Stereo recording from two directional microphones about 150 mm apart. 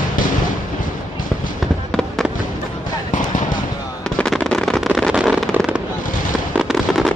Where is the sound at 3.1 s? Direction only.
60° left (ahead or behind).